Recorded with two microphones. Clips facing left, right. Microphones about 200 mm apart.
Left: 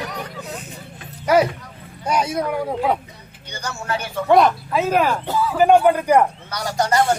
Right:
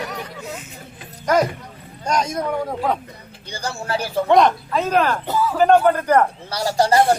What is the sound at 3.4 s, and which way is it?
Speech, 30° right (ahead or behind).